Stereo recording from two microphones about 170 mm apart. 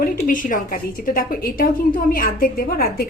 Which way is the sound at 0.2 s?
50° left (ahead or behind).